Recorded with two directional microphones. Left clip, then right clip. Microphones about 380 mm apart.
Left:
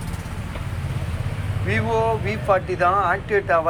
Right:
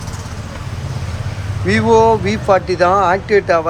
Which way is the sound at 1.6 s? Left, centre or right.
Centre.